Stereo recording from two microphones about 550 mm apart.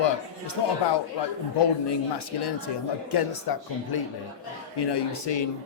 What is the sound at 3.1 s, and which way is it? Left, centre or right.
Speech, left.